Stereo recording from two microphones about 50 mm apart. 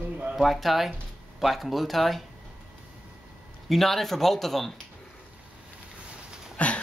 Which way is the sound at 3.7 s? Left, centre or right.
Centre.